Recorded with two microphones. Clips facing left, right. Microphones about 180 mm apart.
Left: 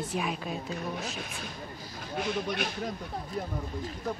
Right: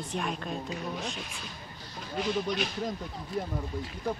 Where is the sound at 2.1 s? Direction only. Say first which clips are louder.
Right 1 dB; 55° left (ahead or behind).